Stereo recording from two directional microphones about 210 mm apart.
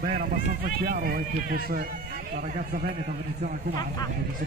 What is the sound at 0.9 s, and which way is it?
Speech, 45° right (ahead or behind).